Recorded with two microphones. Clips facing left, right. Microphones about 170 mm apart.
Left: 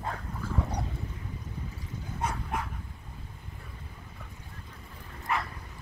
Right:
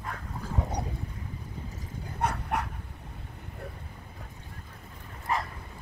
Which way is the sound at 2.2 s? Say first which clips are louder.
Right 3 dB; 70° right (ahead or behind).